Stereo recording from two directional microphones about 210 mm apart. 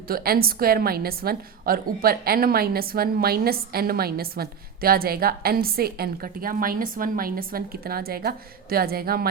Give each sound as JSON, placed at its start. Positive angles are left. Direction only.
{"t": 0.1, "sound": "a woman's voice", "side_deg": -45}